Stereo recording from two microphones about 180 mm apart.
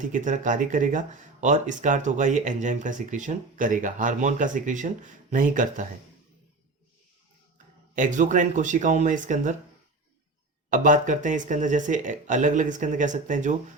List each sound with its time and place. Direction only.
0.0 s speech: 45° right (ahead or behind)
7.9 s speech: 45° right (ahead or behind)
10.7 s speech: 45° right (ahead or behind)